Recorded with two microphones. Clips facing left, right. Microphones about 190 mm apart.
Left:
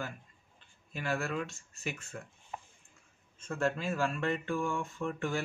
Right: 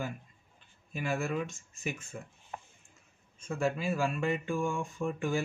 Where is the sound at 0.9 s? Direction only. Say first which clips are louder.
Right 2 dB; 15° right (ahead or behind).